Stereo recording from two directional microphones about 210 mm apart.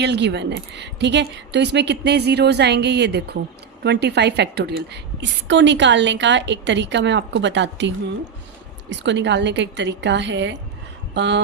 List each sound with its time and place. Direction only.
0.0 s a woman's voice: 55° right (ahead or behind)